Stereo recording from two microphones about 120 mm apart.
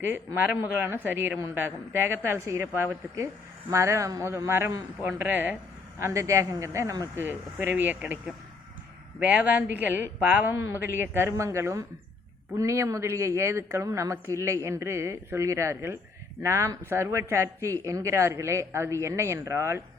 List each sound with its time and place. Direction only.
0.3 s speech: 15° right (ahead or behind)
7.2 s speech: 15° right (ahead or behind)
9.2 s speech: 15° right (ahead or behind)